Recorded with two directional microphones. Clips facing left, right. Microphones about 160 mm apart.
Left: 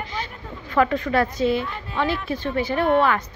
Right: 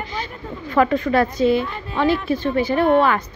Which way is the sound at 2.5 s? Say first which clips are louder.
Right 3 dB; 35° right (ahead or behind).